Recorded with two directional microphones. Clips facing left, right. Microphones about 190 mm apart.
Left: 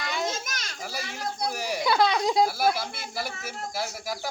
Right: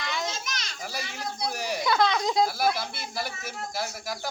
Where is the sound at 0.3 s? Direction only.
50° left (ahead or behind).